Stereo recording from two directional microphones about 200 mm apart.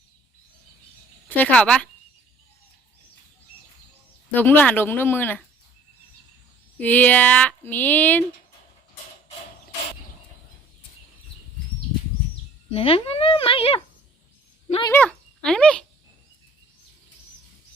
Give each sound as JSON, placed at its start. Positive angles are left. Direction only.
{"t": 1.3, "sound": "speech", "side_deg": 10}
{"t": 4.3, "sound": "speech", "side_deg": 10}
{"t": 6.7, "sound": "speech", "side_deg": 10}
{"t": 12.7, "sound": "speech", "side_deg": 30}
{"t": 14.9, "sound": "speech", "side_deg": 5}